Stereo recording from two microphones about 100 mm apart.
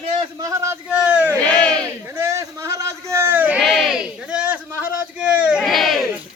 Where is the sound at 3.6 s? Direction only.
5° right (ahead or behind).